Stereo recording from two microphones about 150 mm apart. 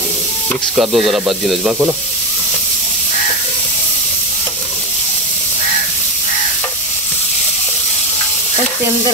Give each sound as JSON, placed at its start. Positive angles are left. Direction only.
{"t": 0.7, "sound": "speech", "side_deg": 0}